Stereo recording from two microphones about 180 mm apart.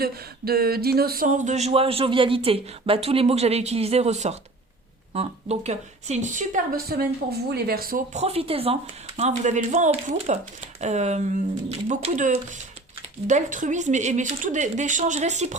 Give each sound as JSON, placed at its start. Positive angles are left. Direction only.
{"t": 0.0, "sound": "speech", "side_deg": -60}